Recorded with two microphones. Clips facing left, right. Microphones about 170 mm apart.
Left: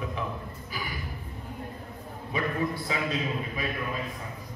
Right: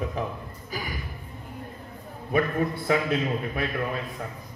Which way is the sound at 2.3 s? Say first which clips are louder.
Right 5 dB; 50° right (ahead or behind).